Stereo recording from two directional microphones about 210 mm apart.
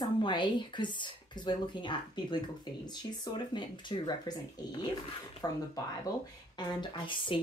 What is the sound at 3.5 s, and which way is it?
Speech, 20° left (ahead or behind).